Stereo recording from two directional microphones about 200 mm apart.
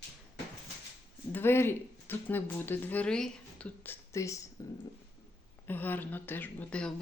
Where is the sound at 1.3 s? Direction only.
10° left (ahead or behind).